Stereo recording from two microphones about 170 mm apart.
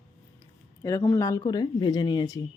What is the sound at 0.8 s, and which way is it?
Speech, 15° left (ahead or behind).